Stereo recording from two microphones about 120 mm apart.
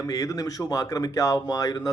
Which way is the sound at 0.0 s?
30° left (ahead or behind).